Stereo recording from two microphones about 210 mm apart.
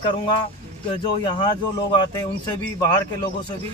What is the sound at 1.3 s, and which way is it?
Speech, 20° left (ahead or behind).